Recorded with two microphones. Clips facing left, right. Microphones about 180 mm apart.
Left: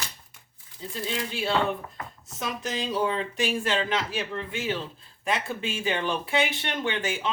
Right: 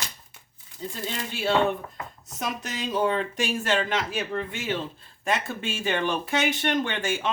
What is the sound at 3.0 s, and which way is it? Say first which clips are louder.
Speech: right 3 dB; 45° right (ahead or behind).